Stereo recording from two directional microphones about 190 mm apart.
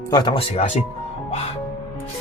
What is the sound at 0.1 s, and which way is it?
Speech, 25° left (ahead or behind).